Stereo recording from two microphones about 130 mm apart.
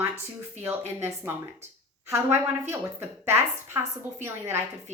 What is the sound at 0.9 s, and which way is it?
A woman's voice, 15° right (ahead or behind).